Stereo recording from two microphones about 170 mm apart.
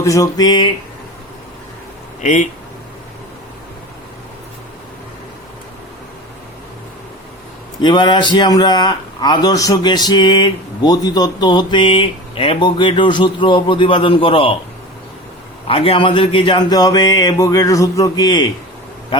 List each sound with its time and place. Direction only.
0.0 s a man's voice: 20° left (ahead or behind)
2.2 s speech: 45° left (ahead or behind)
7.8 s a man's voice: 25° left (ahead or behind)
15.6 s a man's voice: 35° left (ahead or behind)